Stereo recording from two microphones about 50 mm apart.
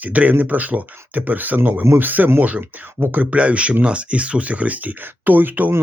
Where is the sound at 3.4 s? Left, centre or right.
Right.